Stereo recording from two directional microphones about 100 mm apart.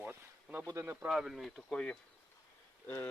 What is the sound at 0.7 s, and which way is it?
Speech, 30° right (ahead or behind).